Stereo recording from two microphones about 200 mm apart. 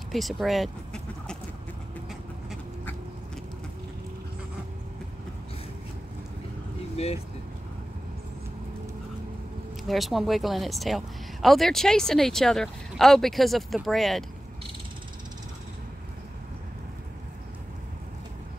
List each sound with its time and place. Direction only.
0.1 s speech: centre (ahead or behind)
7.0 s speech: 30° left (ahead or behind)
9.8 s speech: centre (ahead or behind)